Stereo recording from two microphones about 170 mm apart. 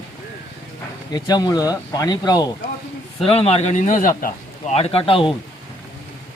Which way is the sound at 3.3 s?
35° left (ahead or behind).